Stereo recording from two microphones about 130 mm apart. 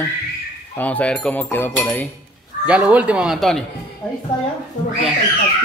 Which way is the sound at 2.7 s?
10° right (ahead or behind).